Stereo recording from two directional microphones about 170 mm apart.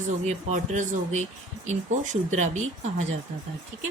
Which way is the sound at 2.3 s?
45° right (ahead or behind).